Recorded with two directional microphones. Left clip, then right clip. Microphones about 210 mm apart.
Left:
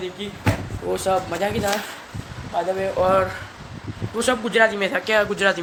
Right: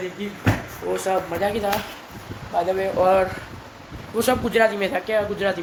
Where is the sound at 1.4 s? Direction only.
Centre (ahead or behind).